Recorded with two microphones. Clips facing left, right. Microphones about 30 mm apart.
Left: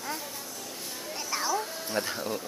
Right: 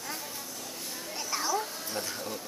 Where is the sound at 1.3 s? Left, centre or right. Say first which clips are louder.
Left 1 dB; centre.